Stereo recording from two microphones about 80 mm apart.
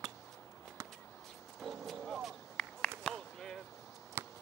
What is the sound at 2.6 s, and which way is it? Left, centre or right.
Run, centre.